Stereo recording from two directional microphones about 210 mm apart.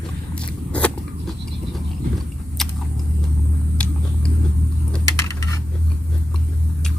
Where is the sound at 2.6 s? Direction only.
Centre (ahead or behind).